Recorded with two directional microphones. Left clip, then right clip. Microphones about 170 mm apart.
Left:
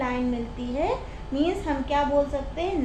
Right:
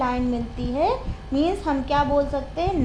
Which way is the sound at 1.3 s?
40° right (ahead or behind).